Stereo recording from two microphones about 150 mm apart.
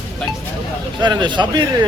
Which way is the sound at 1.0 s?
30° right (ahead or behind).